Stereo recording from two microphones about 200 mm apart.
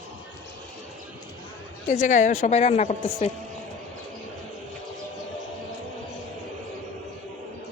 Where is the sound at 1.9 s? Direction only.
40° left (ahead or behind).